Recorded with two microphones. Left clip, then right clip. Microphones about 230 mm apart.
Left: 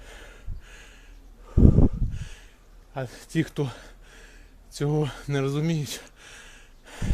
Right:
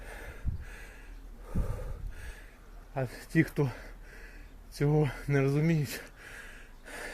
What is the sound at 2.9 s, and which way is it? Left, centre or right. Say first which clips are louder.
Speech: left 1 dB; centre.